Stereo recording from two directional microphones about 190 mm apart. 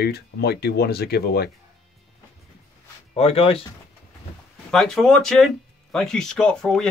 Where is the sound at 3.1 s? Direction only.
30° left (ahead or behind).